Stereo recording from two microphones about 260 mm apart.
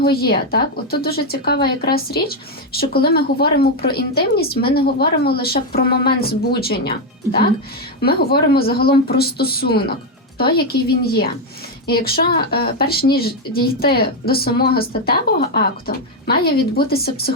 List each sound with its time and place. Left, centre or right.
0.0 s speech: left
8.0 s speech: left